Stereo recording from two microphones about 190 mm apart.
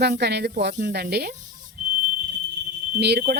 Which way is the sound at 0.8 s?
50° right (ahead or behind).